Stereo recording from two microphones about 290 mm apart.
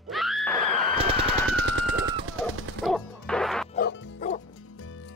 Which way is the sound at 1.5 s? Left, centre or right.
Right.